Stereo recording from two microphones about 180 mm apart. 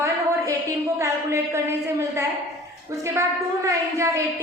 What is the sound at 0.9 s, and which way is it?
A woman's voice, 15° right (ahead or behind).